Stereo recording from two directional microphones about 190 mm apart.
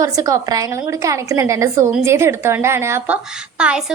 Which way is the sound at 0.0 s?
15° right (ahead or behind).